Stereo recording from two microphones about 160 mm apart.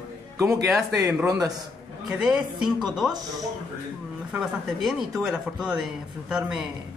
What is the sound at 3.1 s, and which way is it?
Speech, 25° right (ahead or behind).